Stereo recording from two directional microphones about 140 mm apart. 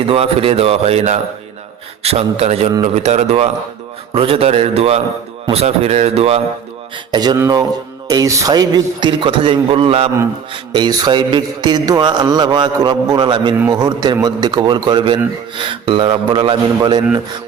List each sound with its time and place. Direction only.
0.0 s speech: 45° right (ahead or behind)
7.1 s a man's voice: 30° right (ahead or behind)